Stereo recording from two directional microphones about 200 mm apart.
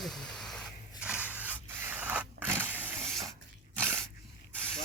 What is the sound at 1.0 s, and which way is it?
Scrape, 10° right (ahead or behind).